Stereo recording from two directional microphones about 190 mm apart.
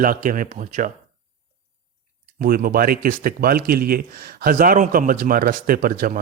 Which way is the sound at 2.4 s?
50° right (ahead or behind).